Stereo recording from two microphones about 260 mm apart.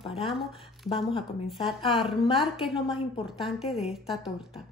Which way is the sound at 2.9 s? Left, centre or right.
Centre.